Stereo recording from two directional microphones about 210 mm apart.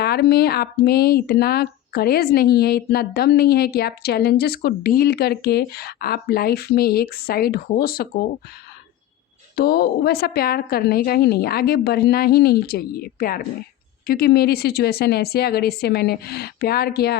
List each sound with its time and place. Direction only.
0.0 s speech: 50° left (ahead or behind)
9.6 s speech: 45° left (ahead or behind)